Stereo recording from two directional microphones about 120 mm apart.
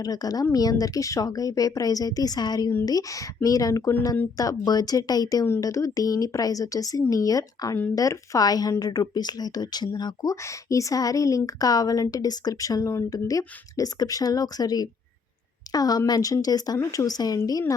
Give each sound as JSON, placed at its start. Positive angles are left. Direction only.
{"t": 0.0, "sound": "a woman's voice", "side_deg": 30}